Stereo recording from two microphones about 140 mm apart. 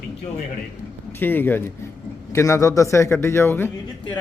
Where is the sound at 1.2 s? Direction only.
15° left (ahead or behind).